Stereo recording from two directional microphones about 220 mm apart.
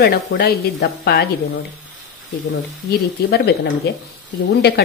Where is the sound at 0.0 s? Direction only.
50° left (ahead or behind).